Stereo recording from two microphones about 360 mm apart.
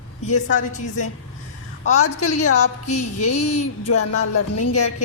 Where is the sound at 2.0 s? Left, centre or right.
Left.